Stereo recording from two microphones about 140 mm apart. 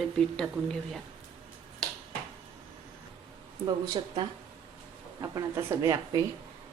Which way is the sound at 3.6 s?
30° right (ahead or behind).